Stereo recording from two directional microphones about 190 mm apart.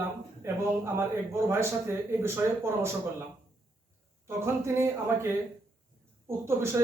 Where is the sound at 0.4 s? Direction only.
15° right (ahead or behind).